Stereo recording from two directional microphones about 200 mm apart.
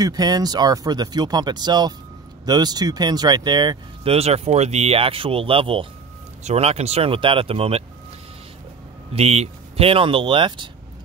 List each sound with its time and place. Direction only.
0.0 s speech: 20° right (ahead or behind)
9.1 s speech: 30° right (ahead or behind)